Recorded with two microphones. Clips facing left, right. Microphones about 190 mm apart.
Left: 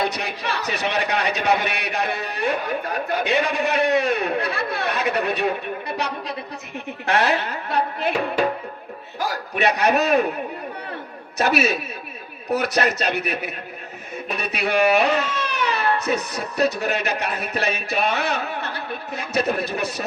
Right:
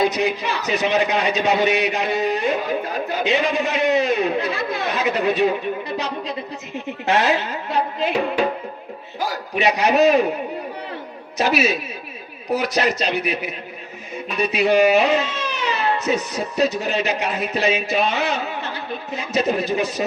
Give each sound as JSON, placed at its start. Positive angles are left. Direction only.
{"t": 0.0, "sound": "speech", "side_deg": 60}
{"t": 6.7, "sound": "speech", "side_deg": 60}
{"t": 9.6, "sound": "speech", "side_deg": 55}
{"t": 11.3, "sound": "speech", "side_deg": 55}